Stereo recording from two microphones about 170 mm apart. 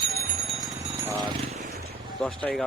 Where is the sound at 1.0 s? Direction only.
20° right (ahead or behind).